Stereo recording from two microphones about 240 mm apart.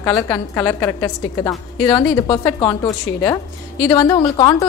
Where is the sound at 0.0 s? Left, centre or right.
Centre.